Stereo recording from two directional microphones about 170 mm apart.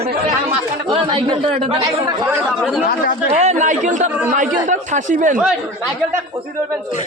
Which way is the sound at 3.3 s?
45° right (ahead or behind).